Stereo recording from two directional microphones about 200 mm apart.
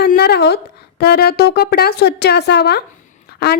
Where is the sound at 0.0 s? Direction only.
55° left (ahead or behind).